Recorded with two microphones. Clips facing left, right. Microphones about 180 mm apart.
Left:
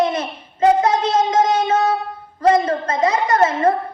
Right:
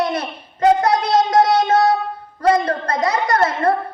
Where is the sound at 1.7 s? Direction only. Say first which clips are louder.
Right 2 dB; 35° right (ahead or behind).